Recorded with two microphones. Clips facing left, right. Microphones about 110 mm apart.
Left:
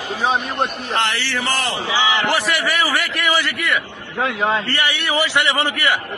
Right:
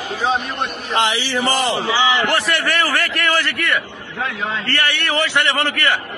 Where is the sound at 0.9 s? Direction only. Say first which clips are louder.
Right 6 dB; 15° right (ahead or behind).